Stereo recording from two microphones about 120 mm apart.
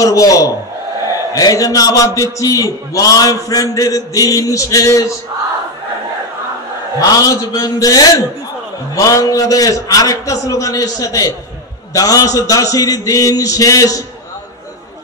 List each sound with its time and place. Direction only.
0.0 s a man's voice: 30° left (ahead or behind)
7.0 s a man's voice: 30° left (ahead or behind)